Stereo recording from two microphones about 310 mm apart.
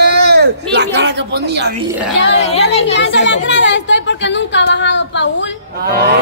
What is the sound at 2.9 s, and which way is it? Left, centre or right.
Speech, left.